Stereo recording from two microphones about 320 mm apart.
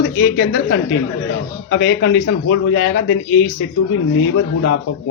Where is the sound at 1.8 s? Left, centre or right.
Left.